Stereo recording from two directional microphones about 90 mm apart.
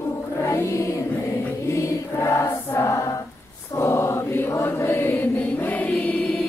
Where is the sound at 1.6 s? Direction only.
30° left (ahead or behind).